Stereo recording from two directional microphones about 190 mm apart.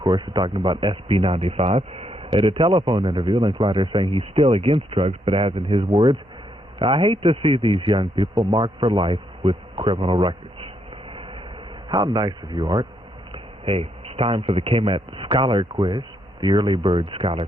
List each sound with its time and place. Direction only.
0.0 s a man's voice: 25° right (ahead or behind)
11.9 s a man's voice: 25° right (ahead or behind)